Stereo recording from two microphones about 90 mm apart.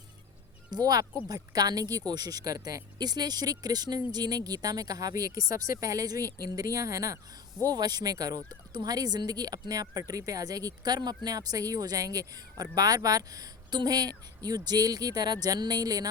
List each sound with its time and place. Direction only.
0.7 s speech: 45° right (ahead or behind)